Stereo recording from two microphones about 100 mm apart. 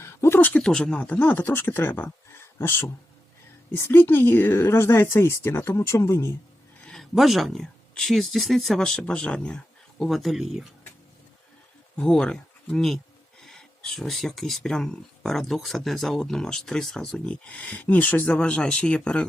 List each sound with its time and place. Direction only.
0.0 s speech: 25° left (ahead or behind)
6.8 s speech: 5° left (ahead or behind)
10.0 s speech: centre (ahead or behind)
11.9 s speech: 5° left (ahead or behind)